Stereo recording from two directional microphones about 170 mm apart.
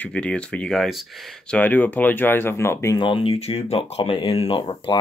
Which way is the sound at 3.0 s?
30° left (ahead or behind).